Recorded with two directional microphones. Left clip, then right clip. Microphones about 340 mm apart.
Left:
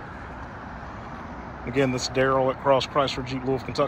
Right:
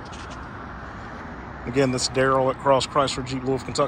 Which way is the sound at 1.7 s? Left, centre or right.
Centre.